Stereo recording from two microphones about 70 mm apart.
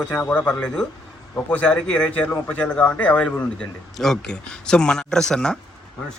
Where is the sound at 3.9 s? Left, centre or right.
Centre.